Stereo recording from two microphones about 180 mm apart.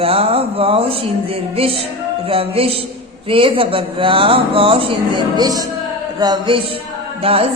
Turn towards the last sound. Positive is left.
turn(degrees=-30)  # may be behind; listen again after turning